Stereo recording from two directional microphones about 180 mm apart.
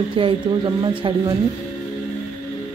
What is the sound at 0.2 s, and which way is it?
Speech, 25° right (ahead or behind).